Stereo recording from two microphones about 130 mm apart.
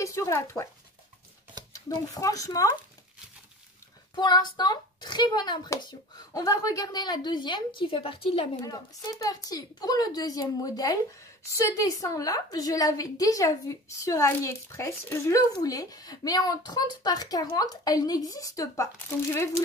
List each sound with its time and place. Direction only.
0.0 s speech: 25° left (ahead or behind)
1.7 s a woman's voice: 25° left (ahead or behind)
4.1 s a child's voice: 35° left (ahead or behind)
8.6 s a woman's voice: 30° left (ahead or behind)